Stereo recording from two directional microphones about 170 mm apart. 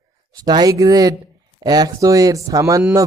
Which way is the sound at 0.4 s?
25° right (ahead or behind).